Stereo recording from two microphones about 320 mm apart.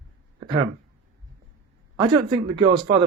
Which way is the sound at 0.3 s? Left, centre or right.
Centre.